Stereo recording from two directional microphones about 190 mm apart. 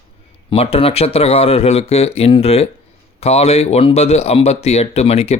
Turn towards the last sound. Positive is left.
turn(degrees=35)  # may be behind; listen again after turning